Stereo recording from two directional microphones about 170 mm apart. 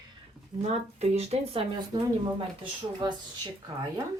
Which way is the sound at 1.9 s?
25° right (ahead or behind).